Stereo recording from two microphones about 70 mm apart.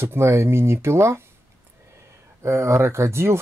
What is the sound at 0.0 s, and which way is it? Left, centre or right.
Speech, right.